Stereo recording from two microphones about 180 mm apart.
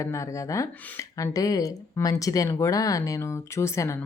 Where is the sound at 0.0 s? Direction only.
15° left (ahead or behind).